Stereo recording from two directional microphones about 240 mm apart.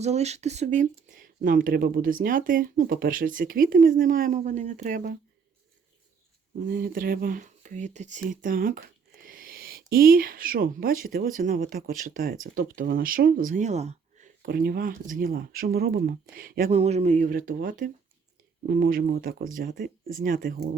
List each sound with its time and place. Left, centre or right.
0.0 s speech: right
6.7 s speech: right